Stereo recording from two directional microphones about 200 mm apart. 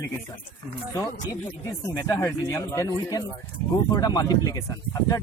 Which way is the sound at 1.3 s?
15° left (ahead or behind).